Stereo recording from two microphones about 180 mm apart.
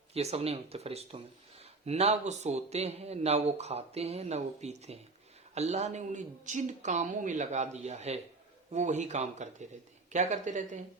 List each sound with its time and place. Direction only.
0.1 s speech: 35° right (ahead or behind)